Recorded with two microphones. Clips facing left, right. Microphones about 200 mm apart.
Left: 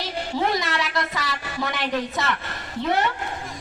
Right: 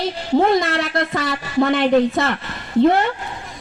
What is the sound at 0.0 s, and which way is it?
A woman's voice, 55° right (ahead or behind).